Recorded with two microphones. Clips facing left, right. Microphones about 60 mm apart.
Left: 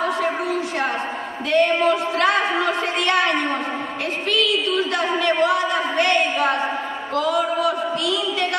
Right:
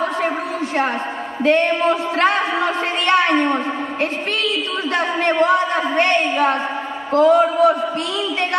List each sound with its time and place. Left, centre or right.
1.4 s a man's voice: right